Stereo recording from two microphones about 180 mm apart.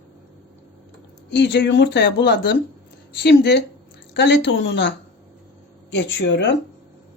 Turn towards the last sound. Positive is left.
turn(degrees=75)  # may be behind; listen again after turning